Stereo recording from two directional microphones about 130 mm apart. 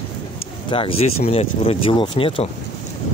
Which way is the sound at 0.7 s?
45° left (ahead or behind).